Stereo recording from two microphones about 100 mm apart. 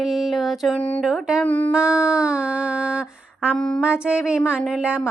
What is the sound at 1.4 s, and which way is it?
Speech, 15° left (ahead or behind).